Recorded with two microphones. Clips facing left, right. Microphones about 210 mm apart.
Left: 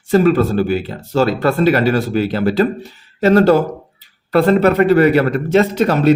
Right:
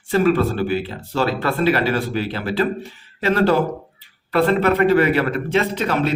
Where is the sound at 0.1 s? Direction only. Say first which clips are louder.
Left 4 dB; 40° left (ahead or behind).